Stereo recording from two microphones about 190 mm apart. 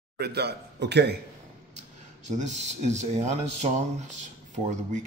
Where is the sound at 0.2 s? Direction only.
60° right (ahead or behind).